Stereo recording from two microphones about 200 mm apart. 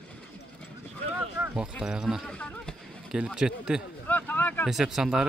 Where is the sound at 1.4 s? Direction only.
10° right (ahead or behind).